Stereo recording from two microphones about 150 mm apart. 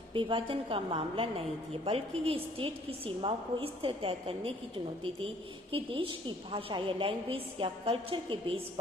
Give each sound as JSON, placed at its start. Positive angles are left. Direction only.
{"t": 0.1, "sound": "a woman's voice", "side_deg": -35}
{"t": 5.7, "sound": "a woman's voice", "side_deg": -35}